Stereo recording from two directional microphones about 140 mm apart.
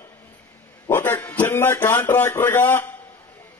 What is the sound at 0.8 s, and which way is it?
A man's voice, 15° left (ahead or behind).